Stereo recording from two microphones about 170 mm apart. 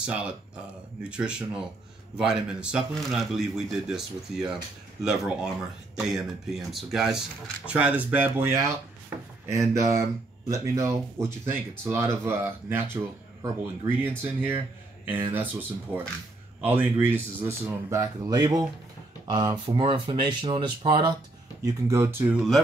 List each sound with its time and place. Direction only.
0.0 s speech: 5° right (ahead or behind); by 21.2 s 30° right (ahead or behind)
21.6 s speech: 20° right (ahead or behind)